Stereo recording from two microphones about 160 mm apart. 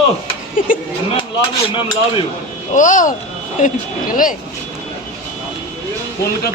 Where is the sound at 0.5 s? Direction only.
60° left (ahead or behind).